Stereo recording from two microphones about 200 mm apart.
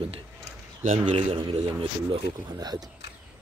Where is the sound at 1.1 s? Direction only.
35° right (ahead or behind).